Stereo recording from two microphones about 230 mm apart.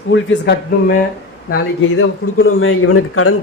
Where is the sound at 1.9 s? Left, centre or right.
Left.